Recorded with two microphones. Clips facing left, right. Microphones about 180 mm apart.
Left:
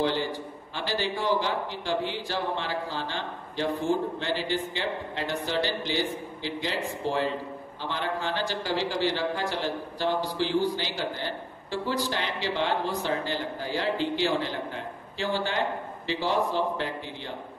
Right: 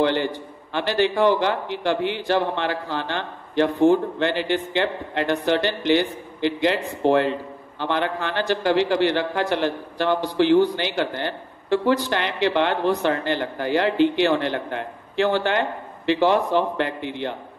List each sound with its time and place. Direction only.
0.0 s a man's voice: 65° right (ahead or behind)